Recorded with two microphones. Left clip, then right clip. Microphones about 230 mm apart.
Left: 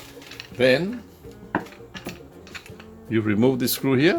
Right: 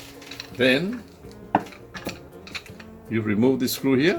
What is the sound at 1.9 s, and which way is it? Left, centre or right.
Music, centre.